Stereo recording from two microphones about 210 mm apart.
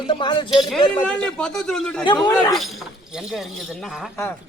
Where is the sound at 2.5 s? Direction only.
Centre (ahead or behind).